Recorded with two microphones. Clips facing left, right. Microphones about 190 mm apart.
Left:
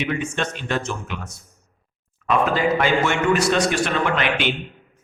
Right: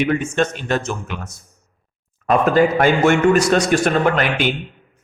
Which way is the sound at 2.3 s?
45° right (ahead or behind).